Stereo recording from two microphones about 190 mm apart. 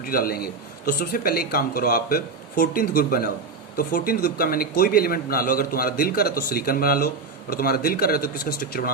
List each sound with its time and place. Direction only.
0.0 s a man's voice: 50° left (ahead or behind)